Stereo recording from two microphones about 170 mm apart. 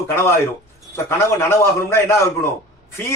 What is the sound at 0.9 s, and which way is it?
Speech, 15° left (ahead or behind).